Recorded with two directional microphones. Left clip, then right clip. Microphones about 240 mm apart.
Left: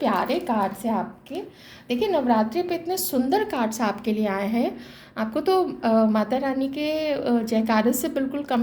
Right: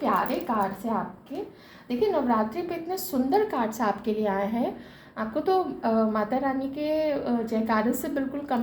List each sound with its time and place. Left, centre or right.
0.0 s a woman's voice: left